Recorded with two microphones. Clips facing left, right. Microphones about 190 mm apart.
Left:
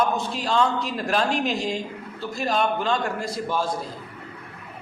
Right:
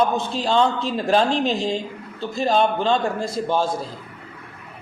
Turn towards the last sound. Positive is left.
turn(degrees=-25)  # may be behind; listen again after turning